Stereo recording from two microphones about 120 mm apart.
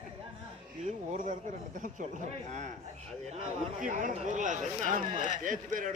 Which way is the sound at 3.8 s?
90° right.